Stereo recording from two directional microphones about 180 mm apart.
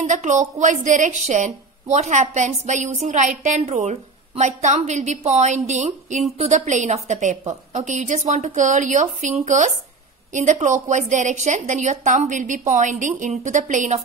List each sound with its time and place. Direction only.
0.0 s a woman's voice: 40° right (ahead or behind)